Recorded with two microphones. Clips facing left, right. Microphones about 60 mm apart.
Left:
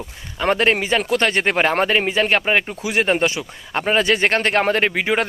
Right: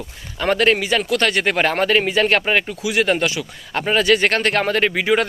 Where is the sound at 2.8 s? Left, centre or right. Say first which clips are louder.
Even; left.